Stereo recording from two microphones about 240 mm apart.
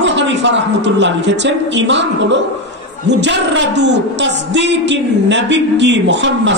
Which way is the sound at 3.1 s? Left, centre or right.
Right.